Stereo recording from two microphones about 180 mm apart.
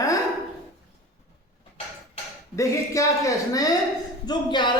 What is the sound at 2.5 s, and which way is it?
Speech, 15° left (ahead or behind).